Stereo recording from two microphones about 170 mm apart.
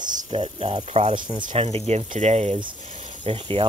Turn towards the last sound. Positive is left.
turn(degrees=-30)  # may be behind; listen again after turning